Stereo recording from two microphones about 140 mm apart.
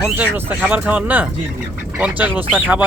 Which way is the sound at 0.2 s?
15° right (ahead or behind).